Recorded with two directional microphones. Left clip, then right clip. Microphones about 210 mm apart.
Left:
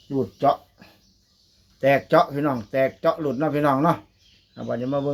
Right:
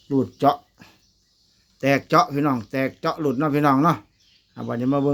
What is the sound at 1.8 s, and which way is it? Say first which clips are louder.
Speech: left 1 dB; 25° right (ahead or behind).